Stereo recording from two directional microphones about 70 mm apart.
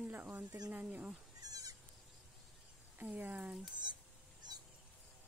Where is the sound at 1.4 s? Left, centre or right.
Right.